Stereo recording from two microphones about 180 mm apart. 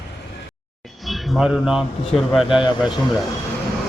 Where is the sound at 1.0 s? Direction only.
Centre (ahead or behind).